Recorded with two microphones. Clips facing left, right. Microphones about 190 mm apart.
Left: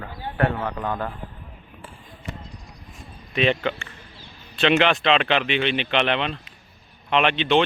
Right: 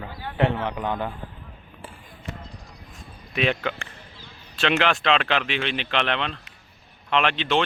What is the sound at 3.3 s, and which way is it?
Speech, 5° right (ahead or behind).